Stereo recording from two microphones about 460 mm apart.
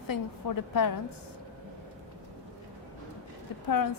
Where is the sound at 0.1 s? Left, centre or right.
Left.